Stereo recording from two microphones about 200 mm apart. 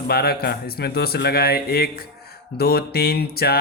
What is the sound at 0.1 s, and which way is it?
Mantra, 50° left (ahead or behind).